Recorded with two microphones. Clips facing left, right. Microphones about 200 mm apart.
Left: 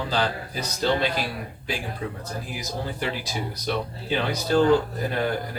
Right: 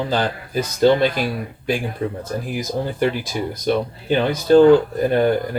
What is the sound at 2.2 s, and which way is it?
Speech, 50° right (ahead or behind).